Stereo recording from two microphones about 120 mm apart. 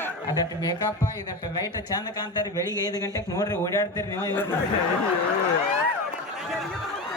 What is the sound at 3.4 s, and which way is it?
Speech, 30° left (ahead or behind).